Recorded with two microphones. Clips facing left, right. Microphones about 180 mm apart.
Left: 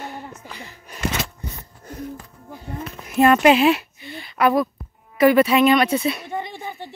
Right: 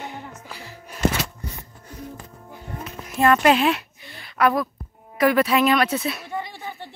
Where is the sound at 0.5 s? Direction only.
5° right (ahead or behind).